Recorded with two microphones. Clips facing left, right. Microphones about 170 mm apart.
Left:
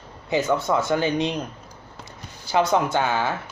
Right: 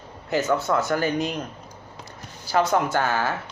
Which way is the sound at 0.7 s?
10° left (ahead or behind).